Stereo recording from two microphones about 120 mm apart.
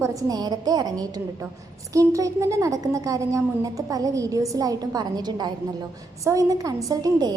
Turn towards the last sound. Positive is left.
turn(degrees=-30)  # may be behind; listen again after turning